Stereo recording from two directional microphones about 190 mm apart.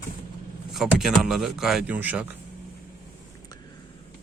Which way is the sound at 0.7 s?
Centre (ahead or behind).